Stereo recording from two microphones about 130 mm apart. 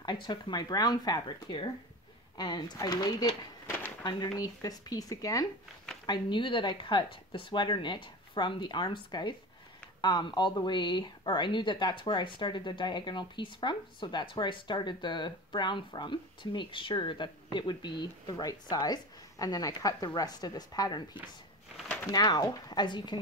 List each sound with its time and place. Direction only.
0.0 s speech: 35° left (ahead or behind)
3.6 s a sound: 15° left (ahead or behind)
4.0 s speech: 30° left (ahead or behind)